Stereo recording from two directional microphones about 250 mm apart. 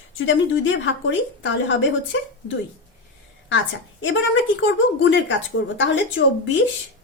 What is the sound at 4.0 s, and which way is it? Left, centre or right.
A woman's voice, left.